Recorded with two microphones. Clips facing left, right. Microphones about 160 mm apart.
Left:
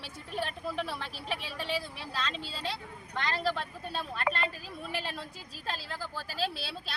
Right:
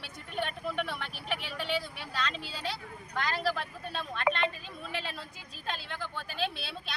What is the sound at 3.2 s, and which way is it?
Speech, centre (ahead or behind).